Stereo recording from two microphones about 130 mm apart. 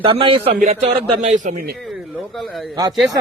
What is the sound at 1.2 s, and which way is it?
Speech, 70° right (ahead or behind).